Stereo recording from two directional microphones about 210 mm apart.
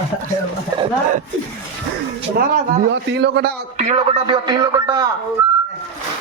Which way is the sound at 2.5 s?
55° right (ahead or behind).